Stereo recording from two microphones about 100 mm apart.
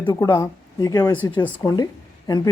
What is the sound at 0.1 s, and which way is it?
A woman's voice, 45° left (ahead or behind).